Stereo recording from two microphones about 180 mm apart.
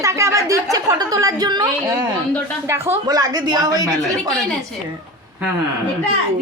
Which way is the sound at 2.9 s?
20° right (ahead or behind).